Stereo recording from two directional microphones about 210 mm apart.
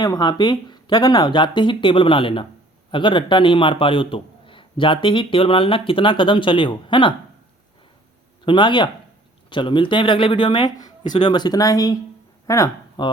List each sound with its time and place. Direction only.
0.0 s a man's voice: 20° left (ahead or behind)
8.4 s a man's voice: 20° left (ahead or behind)